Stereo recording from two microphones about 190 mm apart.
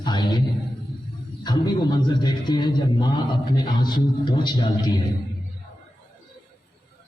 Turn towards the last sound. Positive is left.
turn(degrees=20)  # may be behind; listen again after turning